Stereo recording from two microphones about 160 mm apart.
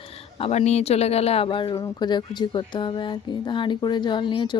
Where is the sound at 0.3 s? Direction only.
40° left (ahead or behind).